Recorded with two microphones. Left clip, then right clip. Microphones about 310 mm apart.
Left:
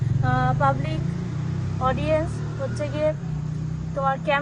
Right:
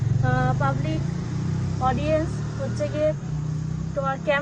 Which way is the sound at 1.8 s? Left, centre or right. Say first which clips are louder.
Even; centre.